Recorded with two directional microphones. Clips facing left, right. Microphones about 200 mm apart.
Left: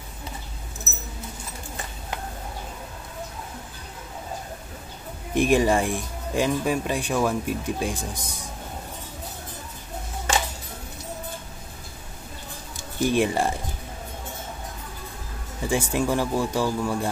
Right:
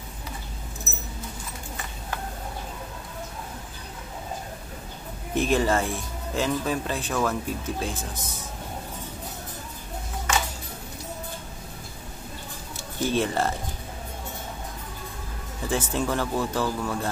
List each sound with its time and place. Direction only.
5.3 s speech: 15° left (ahead or behind)
10.3 s music: 30° left (ahead or behind)
13.0 s speech: 15° left (ahead or behind)
15.6 s speech: 10° left (ahead or behind)